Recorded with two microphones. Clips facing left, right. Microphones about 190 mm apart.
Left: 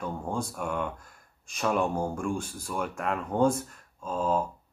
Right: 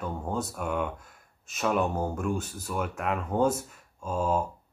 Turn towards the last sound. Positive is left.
turn(degrees=-10)  # may be behind; listen again after turning